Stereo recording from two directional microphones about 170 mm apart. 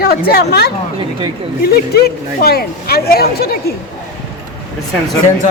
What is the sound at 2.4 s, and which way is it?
Speech, 65° left (ahead or behind).